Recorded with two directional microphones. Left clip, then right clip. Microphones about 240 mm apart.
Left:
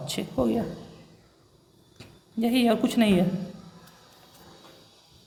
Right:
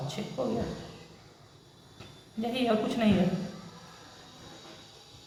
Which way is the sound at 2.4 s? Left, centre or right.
Left.